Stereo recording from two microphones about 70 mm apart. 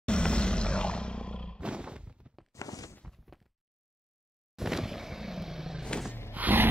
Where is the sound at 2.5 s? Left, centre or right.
Left.